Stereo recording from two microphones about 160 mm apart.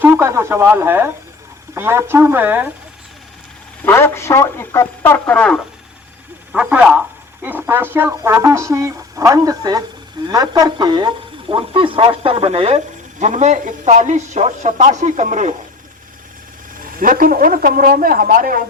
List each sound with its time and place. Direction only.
0.0 s speech: 15° right (ahead or behind)
3.8 s speech: 15° left (ahead or behind)
6.5 s speech: 5° right (ahead or behind); by 15.5 s 45° right (ahead or behind)
17.0 s speech: 60° right (ahead or behind)